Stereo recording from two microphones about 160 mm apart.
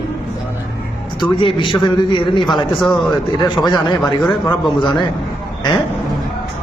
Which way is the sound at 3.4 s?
25° left (ahead or behind).